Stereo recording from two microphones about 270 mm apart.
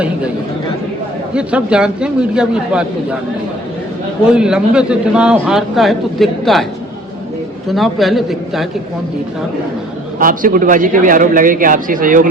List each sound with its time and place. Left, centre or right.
1.3 s a man's voice: centre
4.2 s a man's voice: centre
7.7 s a man's voice: centre
10.2 s a man's voice: right